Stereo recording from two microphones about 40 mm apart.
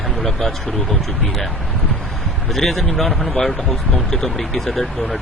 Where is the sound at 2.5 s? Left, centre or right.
Centre.